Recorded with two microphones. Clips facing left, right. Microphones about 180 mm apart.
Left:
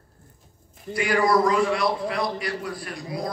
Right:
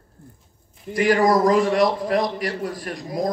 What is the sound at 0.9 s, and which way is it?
A man's voice, 40° right (ahead or behind).